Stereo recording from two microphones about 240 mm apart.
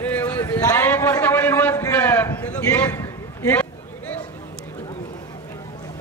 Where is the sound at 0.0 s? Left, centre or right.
Centre.